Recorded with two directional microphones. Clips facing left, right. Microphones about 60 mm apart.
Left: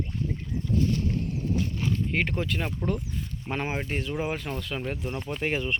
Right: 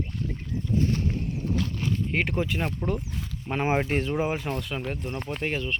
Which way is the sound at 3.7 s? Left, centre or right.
Right.